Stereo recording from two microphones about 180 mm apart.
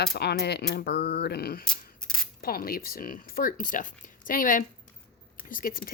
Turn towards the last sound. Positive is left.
turn(degrees=50)  # may be behind; listen again after turning